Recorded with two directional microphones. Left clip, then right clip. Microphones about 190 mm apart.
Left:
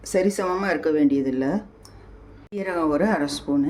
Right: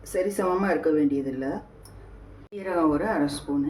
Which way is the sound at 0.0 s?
50° left (ahead or behind).